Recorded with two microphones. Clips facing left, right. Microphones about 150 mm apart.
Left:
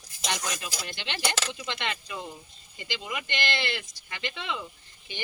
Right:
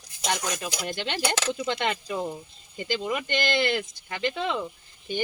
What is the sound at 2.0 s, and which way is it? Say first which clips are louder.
Speech: right 8 dB; 35° right (ahead or behind).